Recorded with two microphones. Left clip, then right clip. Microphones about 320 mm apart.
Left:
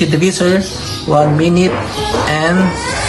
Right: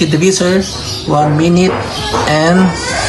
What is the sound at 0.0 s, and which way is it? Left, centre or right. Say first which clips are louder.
Speech: right 2 dB; centre.